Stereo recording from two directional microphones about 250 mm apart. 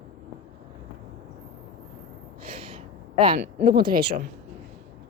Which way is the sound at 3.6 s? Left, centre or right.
Right.